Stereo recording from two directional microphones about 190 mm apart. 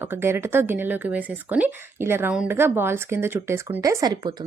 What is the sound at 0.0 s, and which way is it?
Speech, 10° right (ahead or behind).